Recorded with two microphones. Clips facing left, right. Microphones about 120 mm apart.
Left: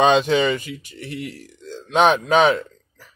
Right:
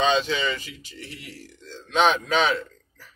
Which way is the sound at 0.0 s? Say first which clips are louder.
Left 7 dB; 55° left (ahead or behind).